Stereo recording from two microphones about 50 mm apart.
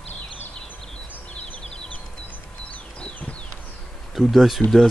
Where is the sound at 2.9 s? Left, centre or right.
Left.